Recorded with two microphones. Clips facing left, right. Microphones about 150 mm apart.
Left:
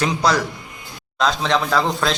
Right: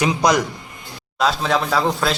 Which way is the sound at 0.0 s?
15° right (ahead or behind).